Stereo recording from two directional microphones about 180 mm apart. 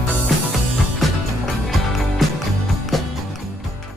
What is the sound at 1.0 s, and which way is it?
Music, centre (ahead or behind).